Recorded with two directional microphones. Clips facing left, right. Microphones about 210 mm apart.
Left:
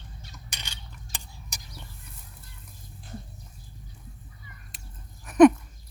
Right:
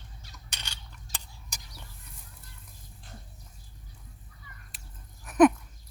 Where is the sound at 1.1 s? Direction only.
55° left (ahead or behind).